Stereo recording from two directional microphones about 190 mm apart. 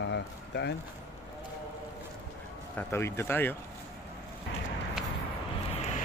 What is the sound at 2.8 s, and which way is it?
Speech, 15° left (ahead or behind).